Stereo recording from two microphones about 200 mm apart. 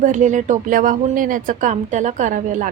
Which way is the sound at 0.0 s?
40° right (ahead or behind).